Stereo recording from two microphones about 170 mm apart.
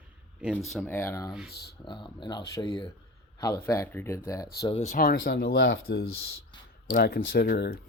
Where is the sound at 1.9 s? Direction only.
25° left (ahead or behind).